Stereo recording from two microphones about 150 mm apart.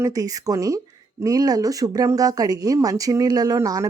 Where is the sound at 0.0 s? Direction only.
25° right (ahead or behind).